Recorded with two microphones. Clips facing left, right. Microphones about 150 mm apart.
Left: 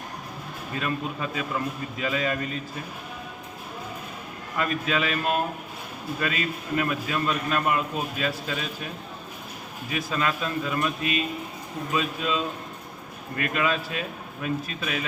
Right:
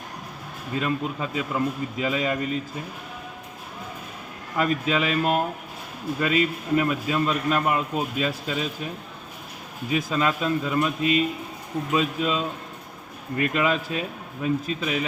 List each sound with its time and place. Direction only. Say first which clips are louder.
0.8 s a man's voice: right 3 dB; 25° right (ahead or behind)
4.5 s a man's voice: right 3 dB; 20° right (ahead or behind)
9.9 s a man's voice: right 4 dB; 25° right (ahead or behind)